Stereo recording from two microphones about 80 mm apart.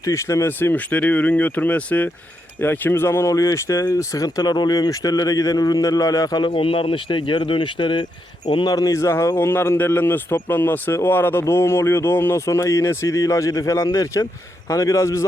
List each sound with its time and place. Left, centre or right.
0.0 s speech: left
0.6 s speech: left
6.4 s speech: left
8.4 s speech: left